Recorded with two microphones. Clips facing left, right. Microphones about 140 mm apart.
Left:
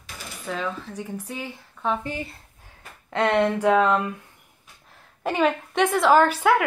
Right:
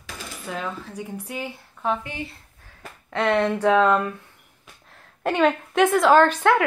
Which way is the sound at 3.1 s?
25° left (ahead or behind).